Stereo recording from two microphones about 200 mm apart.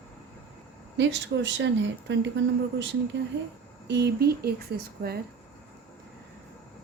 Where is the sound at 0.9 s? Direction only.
65° right (ahead or behind).